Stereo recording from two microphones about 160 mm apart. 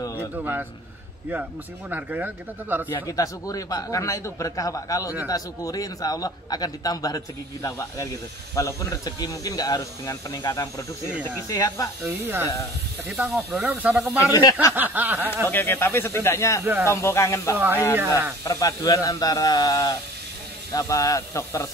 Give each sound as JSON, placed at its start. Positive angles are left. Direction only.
{"t": 0.0, "sound": "a sound", "side_deg": 20}
{"t": 0.4, "sound": "speech", "side_deg": -10}
{"t": 1.9, "sound": "speech", "side_deg": -10}
{"t": 2.9, "sound": "a man's voice", "side_deg": 20}
{"t": 12.0, "sound": "speech", "side_deg": -15}
{"t": 14.2, "sound": "a man's voice", "side_deg": 20}
{"t": 14.7, "sound": "speech", "side_deg": -10}
{"t": 15.4, "sound": "speech", "side_deg": 15}
{"t": 16.6, "sound": "speech", "side_deg": -15}
{"t": 16.9, "sound": "a man's voice", "side_deg": 20}
{"t": 17.9, "sound": "speech", "side_deg": -15}
{"t": 18.4, "sound": "a man's voice", "side_deg": 20}